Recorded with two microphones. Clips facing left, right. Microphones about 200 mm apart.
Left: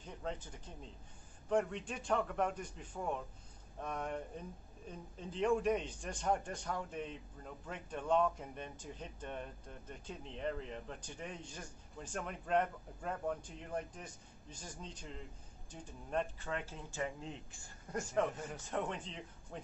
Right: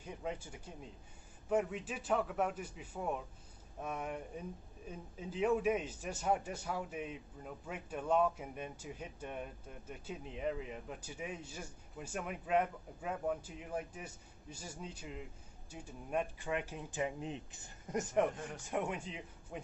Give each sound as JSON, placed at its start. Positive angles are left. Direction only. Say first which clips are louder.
{"t": 0.0, "sound": "a man's voice", "louder": "right 1 dB", "side_deg": -10}